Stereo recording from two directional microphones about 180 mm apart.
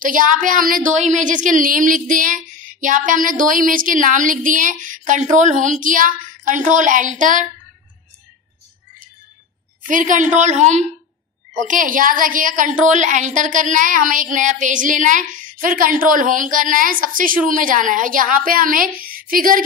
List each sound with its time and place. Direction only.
0.0 s a woman's voice: 50° right (ahead or behind)
9.8 s a woman's voice: 45° right (ahead or behind)